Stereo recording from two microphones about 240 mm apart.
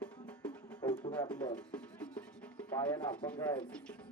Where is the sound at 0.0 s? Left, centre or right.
Centre.